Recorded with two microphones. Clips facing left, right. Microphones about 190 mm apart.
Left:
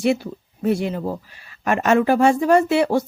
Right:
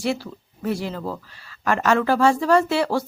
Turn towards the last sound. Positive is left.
turn(degrees=20)  # may be behind; listen again after turning